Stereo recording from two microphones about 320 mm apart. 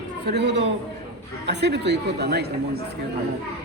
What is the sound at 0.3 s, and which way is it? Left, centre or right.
A woman's voice, right.